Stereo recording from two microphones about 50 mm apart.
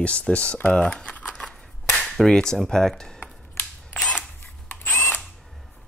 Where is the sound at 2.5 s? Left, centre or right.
Centre.